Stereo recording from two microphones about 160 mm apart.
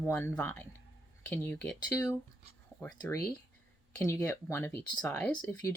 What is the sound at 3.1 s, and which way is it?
Speech, 15° left (ahead or behind).